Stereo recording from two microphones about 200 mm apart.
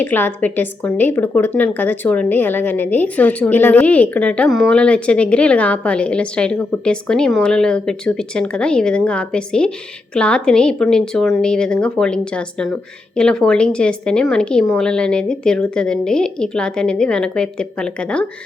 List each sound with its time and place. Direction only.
0.0 s a woman's voice: 10° left (ahead or behind)